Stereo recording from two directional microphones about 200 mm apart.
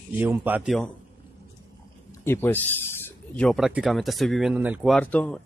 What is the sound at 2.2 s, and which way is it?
Speech, 10° left (ahead or behind).